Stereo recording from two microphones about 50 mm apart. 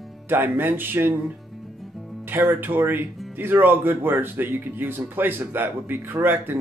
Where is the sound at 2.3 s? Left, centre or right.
Right.